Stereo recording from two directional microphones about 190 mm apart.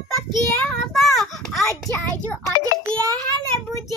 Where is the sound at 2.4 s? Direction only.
5° left (ahead or behind).